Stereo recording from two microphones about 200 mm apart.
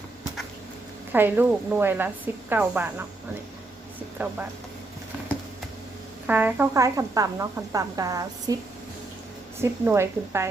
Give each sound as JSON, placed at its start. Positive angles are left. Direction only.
{"t": 1.1, "sound": "speech", "side_deg": -10}
{"t": 4.2, "sound": "speech", "side_deg": -10}
{"t": 6.2, "sound": "speech", "side_deg": -10}
{"t": 9.6, "sound": "speech", "side_deg": -10}